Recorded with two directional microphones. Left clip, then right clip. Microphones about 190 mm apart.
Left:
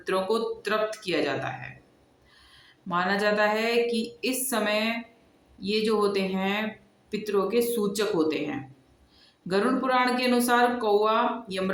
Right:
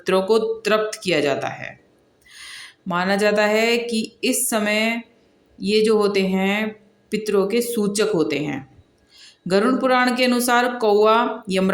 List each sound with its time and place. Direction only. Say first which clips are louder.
0.0 s a woman's voice: right 8 dB; 35° right (ahead or behind)